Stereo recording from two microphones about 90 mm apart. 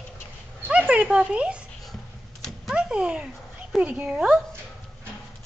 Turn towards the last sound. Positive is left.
turn(degrees=-10)  # may be behind; listen again after turning